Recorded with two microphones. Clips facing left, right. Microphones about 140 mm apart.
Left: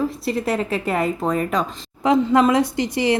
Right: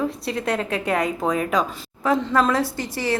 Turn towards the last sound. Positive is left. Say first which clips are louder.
# left 6 dB
turn(degrees=20)  # may be behind; listen again after turning